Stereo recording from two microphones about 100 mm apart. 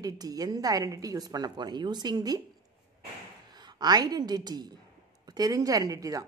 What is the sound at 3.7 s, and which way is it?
A woman's voice, 45° right (ahead or behind).